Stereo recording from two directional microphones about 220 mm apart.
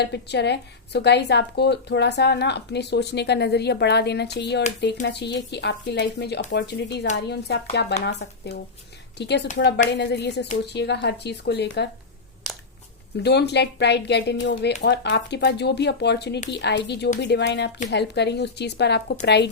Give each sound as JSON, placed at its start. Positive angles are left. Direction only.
{"t": 0.0, "sound": "a woman's voice", "side_deg": 50}
{"t": 9.1, "sound": "a woman's voice", "side_deg": 50}
{"t": 13.2, "sound": "a woman's voice", "side_deg": 50}